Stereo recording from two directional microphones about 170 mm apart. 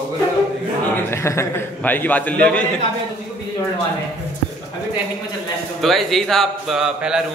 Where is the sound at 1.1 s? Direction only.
15° left (ahead or behind).